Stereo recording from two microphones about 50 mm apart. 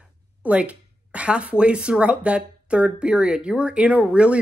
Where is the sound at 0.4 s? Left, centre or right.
Right.